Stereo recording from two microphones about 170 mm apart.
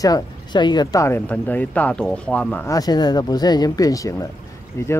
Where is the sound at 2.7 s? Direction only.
25° left (ahead or behind).